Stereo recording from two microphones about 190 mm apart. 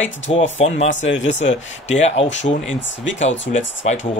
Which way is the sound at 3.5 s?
50° left (ahead or behind).